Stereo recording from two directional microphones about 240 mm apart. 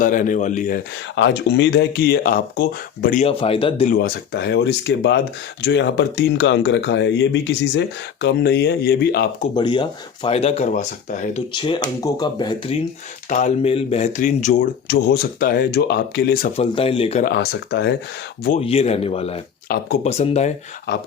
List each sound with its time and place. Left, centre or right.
0.0 s speech: left
1.1 s speech: left
3.9 s speech: left
9.6 s speech: centre
11.5 s speech: centre
13.3 s speech: left
16.6 s speech: left
17.2 s speech: left
18.6 s speech: left
19.6 s speech: left
20.1 s speech: left